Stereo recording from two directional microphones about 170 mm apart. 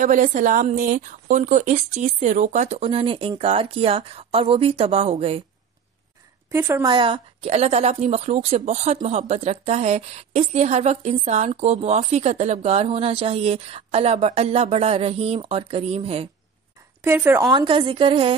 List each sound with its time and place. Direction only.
0.0 s a woman's voice: 50° right (ahead or behind)
6.5 s speech: 15° right (ahead or behind)
6.9 s a woman's voice: 30° right (ahead or behind)
17.0 s speech: 10° right (ahead or behind)
17.5 s a woman's voice: 25° right (ahead or behind)